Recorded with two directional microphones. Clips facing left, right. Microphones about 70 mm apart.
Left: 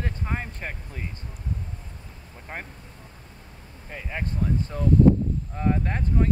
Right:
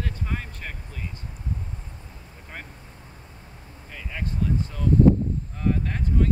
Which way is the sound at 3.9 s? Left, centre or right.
Left.